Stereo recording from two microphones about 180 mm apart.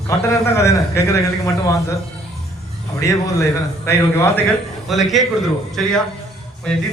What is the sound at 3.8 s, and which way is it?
Speech, 15° left (ahead or behind).